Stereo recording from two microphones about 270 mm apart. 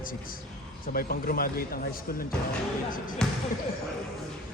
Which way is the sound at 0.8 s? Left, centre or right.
Left.